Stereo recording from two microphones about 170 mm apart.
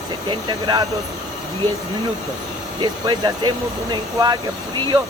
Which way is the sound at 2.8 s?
25° right (ahead or behind).